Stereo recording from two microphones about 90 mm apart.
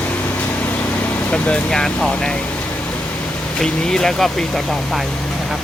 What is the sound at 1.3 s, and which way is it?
Speech, 10° left (ahead or behind).